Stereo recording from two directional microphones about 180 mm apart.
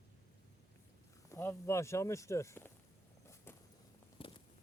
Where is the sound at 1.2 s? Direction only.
15° left (ahead or behind).